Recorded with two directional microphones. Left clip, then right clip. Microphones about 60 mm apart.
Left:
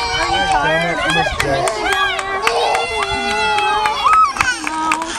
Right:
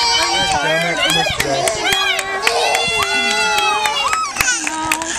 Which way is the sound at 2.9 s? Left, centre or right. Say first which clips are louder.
Right 2 dB; right.